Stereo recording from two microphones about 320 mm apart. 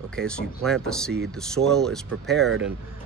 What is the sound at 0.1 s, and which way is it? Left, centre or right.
Speech, centre.